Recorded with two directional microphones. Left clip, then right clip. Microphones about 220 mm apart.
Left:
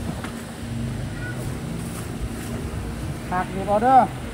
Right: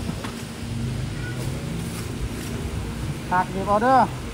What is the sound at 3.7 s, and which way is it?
Speech, 25° right (ahead or behind).